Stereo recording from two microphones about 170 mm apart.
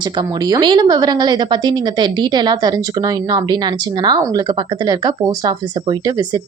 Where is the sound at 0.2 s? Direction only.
25° right (ahead or behind).